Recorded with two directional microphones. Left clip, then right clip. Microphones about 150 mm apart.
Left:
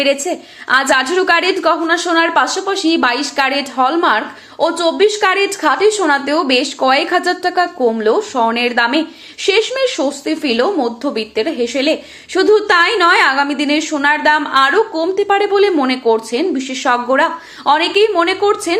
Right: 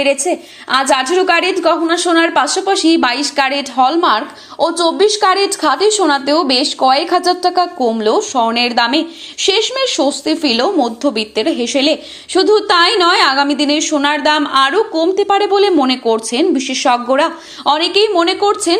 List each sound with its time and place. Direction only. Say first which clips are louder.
0.0 s speech: right 1 dB; 30° right (ahead or behind)